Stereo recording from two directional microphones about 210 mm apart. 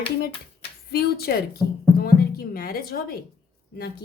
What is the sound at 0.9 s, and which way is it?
Speech, 50° left (ahead or behind).